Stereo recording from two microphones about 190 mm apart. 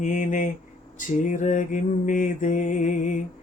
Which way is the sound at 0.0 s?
40° left (ahead or behind).